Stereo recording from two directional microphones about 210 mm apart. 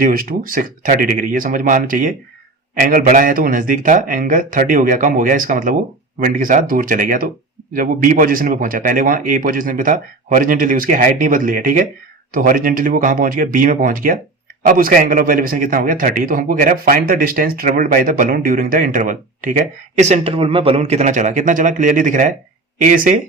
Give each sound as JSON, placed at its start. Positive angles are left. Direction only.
{"t": 0.0, "sound": "a man's voice", "side_deg": -45}